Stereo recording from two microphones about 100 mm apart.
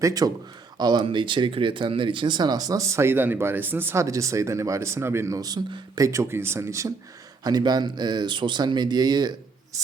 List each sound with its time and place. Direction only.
0.0 s speech: 40° right (ahead or behind)
1.0 s speech: 55° right (ahead or behind); by 5.4 s 25° right (ahead or behind)
5.4 s speech: 40° right (ahead or behind)
6.1 s speech: 25° right (ahead or behind)
7.4 s speech: 40° right (ahead or behind)
9.7 s speech: 35° right (ahead or behind)